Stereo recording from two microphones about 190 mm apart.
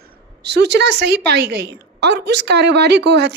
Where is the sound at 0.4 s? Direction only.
60° right (ahead or behind).